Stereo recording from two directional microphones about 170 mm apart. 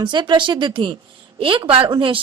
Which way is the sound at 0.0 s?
25° right (ahead or behind).